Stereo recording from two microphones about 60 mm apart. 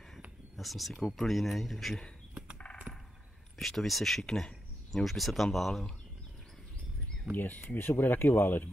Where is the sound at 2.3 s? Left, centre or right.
Centre.